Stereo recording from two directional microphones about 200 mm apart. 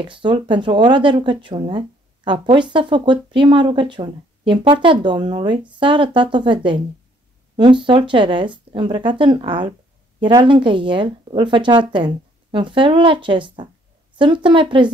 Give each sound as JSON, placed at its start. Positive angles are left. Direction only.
{"t": 0.1, "sound": "speech", "side_deg": -25}